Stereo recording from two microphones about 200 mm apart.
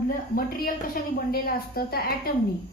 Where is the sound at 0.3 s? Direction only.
45° left (ahead or behind).